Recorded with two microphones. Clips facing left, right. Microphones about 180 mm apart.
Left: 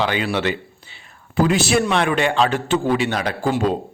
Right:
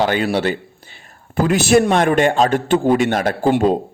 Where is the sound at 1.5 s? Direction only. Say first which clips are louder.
Right 7 dB; 50° right (ahead or behind).